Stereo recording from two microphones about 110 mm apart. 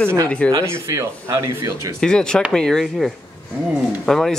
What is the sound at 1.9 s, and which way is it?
A man's voice, 5° left (ahead or behind).